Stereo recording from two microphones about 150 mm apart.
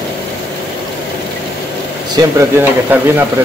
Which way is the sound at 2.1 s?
15° right (ahead or behind).